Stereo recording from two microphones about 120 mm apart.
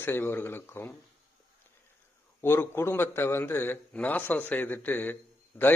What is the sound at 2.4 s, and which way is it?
A man's voice, 20° left (ahead or behind).